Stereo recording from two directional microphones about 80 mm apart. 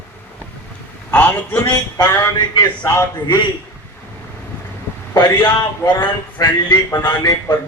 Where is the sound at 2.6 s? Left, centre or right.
Left.